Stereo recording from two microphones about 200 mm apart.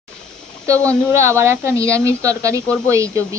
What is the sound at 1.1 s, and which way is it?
A woman's voice, 15° right (ahead or behind).